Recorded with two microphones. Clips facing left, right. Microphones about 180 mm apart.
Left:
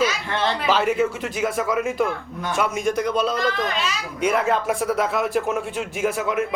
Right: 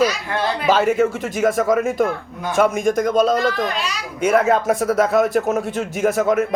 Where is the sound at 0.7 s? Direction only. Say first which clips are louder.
Right 5 dB; 45° right (ahead or behind).